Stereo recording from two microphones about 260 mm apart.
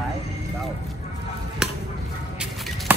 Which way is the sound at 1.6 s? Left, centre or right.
Centre.